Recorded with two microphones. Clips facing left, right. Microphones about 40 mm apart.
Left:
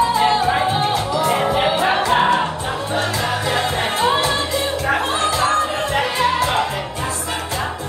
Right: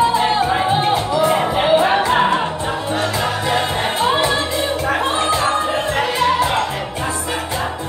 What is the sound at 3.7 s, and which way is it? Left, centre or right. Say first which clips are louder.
Music: right 1 dB; centre.